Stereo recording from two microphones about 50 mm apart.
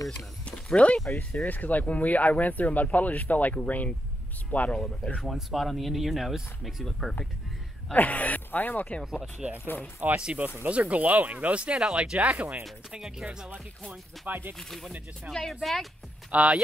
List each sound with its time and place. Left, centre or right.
0.5 s a sound: left
1.4 s speech: left
4.7 s speech: centre
5.2 s speech: centre
7.9 s speech: left
9.0 s speech: centre
9.9 s speech: right
13.0 s speech: centre
14.2 s speech: right
14.6 s speech: centre
16.3 s speech: right